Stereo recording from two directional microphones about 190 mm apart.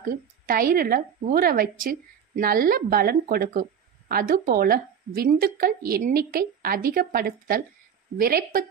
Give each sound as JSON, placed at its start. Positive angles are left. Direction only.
{"t": 0.0, "sound": "a woman's voice", "side_deg": -50}